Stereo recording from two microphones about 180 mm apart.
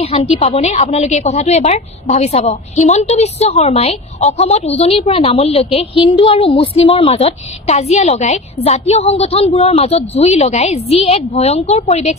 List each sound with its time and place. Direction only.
0.0 s a woman's voice: 30° left (ahead or behind)